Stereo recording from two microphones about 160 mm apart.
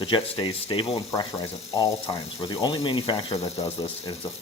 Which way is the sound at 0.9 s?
20° left (ahead or behind).